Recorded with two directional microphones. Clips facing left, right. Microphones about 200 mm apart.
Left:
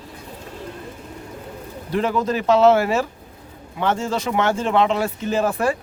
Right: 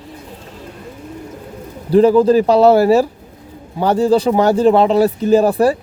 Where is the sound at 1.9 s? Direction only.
35° right (ahead or behind).